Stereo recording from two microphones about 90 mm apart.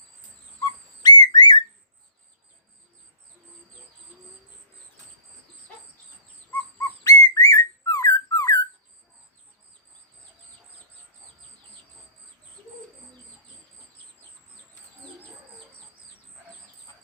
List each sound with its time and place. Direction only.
0.6 s whistling: 50° left (ahead or behind)
6.5 s bird: 20° left (ahead or behind)
7.0 s whistling: 40° left (ahead or behind)